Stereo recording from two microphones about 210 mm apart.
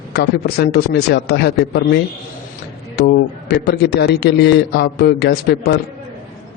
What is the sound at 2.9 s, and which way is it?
A man's voice, 50° left (ahead or behind).